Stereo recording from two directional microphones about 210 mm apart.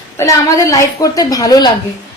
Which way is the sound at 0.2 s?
15° left (ahead or behind).